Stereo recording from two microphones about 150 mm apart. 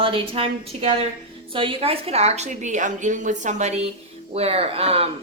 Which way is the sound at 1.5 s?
35° right (ahead or behind).